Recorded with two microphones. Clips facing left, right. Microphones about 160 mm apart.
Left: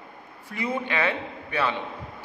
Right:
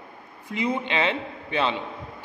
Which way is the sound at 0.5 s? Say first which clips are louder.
Right 2 dB; 20° right (ahead or behind).